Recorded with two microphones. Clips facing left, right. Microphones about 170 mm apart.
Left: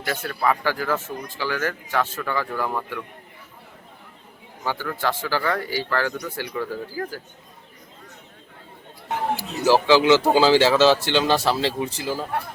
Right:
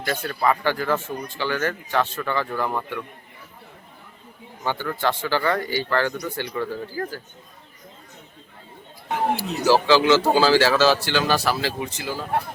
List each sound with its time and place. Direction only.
0.0 s speech: 5° left (ahead or behind)
4.6 s speech: 5° left (ahead or behind)
9.3 s speech: 15° left (ahead or behind)